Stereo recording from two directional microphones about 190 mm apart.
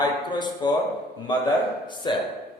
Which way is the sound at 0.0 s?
25° left (ahead or behind).